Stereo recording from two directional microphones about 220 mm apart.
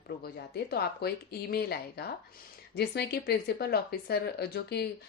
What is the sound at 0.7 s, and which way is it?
A woman's voice, 45° left (ahead or behind).